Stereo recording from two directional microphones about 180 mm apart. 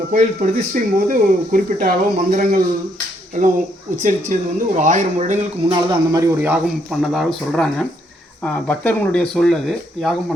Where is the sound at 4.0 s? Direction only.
45° right (ahead or behind).